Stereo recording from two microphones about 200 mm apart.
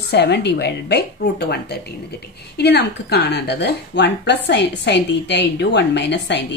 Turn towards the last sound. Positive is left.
turn(degrees=60)  # may be behind; listen again after turning